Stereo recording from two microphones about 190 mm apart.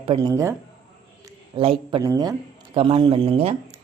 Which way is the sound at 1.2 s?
25° right (ahead or behind).